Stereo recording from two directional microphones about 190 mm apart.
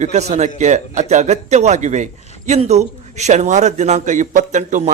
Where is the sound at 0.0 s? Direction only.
35° right (ahead or behind).